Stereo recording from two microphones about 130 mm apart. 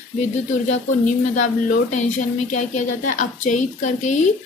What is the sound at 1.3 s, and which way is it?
Speech, 75° left (ahead or behind).